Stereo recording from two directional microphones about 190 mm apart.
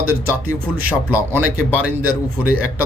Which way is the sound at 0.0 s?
10° right (ahead or behind).